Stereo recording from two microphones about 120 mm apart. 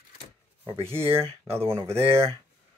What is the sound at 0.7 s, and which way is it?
Speech, 55° right (ahead or behind).